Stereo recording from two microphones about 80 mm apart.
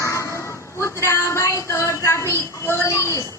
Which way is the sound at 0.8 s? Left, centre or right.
Left.